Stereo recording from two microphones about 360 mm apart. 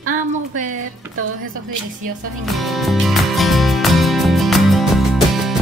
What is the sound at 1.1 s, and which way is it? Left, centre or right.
Speech, right.